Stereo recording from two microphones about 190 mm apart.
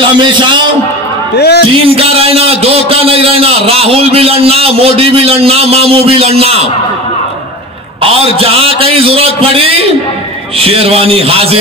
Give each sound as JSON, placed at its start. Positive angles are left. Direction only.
{"t": 0.0, "sound": "a man's voice", "side_deg": -25}
{"t": 1.3, "sound": "speech", "side_deg": 60}
{"t": 1.7, "sound": "a man's voice", "side_deg": -30}
{"t": 8.0, "sound": "a man's voice", "side_deg": -30}